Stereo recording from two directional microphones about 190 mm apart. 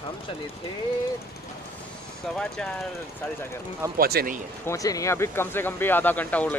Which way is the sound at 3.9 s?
50° right (ahead or behind).